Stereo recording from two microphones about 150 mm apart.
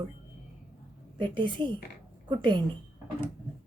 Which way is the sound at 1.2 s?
30° right (ahead or behind).